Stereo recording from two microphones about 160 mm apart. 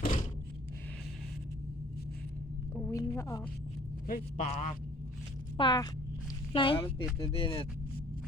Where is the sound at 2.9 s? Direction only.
20° left (ahead or behind).